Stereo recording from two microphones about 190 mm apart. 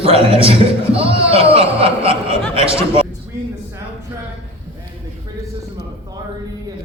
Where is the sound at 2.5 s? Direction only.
30° right (ahead or behind).